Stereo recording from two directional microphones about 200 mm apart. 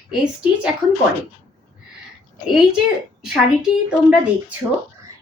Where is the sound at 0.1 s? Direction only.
5° right (ahead or behind).